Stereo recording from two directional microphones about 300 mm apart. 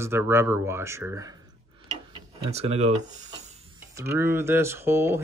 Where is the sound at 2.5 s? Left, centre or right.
Right.